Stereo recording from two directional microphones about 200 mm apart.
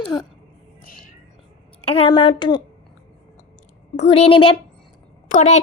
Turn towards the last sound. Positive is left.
turn(degrees=35)  # may be behind; listen again after turning